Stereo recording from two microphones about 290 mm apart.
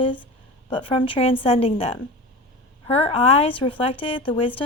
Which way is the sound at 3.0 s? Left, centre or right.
Centre.